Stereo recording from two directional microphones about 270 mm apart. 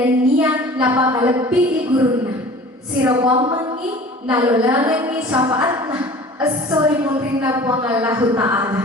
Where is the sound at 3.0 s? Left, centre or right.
Centre.